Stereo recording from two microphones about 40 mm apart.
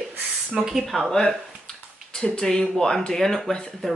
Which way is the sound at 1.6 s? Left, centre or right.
Centre.